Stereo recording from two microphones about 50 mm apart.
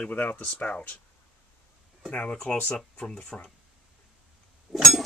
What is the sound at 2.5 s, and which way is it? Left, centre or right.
Speech, left.